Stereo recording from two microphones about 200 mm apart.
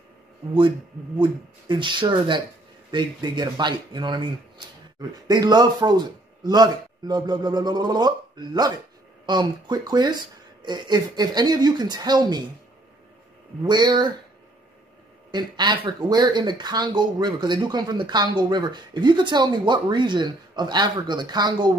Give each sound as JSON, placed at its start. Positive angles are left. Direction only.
{"t": 1.2, "sound": "speech", "side_deg": -25}
{"t": 13.7, "sound": "speech", "side_deg": -20}
{"t": 15.3, "sound": "speech", "side_deg": -20}